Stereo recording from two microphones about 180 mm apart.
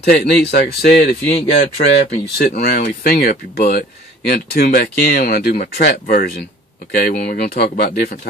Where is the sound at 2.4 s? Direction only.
60° left (ahead or behind).